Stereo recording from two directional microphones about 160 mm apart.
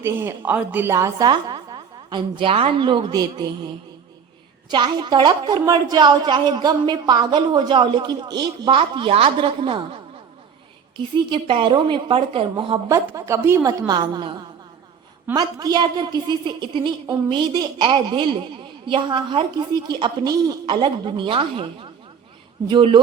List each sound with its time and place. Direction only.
0.0 s a woman's voice: 15° right (ahead or behind)
4.7 s a woman's voice: 30° right (ahead or behind)
10.9 s a woman's voice: 30° right (ahead or behind)
12.9 s a woman's voice: 20° right (ahead or behind)
15.4 s a woman's voice: 25° right (ahead or behind)